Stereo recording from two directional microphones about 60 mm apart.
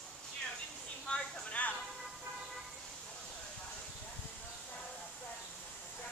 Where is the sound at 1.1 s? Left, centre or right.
Left.